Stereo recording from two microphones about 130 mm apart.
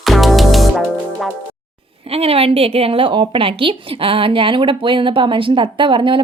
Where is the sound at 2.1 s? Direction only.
50° right (ahead or behind).